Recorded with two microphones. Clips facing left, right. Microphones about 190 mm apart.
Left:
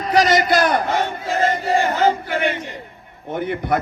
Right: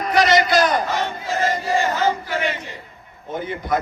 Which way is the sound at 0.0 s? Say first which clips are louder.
Left 1 dB; 35° left (ahead or behind).